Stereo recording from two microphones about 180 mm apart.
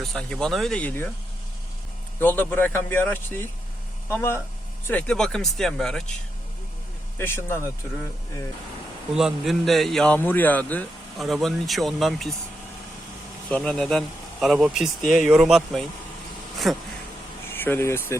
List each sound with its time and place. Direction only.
0.0 s speech: 5° left (ahead or behind)
2.1 s speech: 10° left (ahead or behind)
7.2 s speech: 15° left (ahead or behind)
9.1 s speech: centre (ahead or behind)
13.5 s speech: 5° left (ahead or behind)
17.5 s speech: 10° left (ahead or behind)